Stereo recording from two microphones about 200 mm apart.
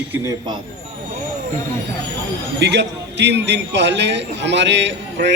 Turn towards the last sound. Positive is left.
turn(degrees=-60)  # may be behind; listen again after turning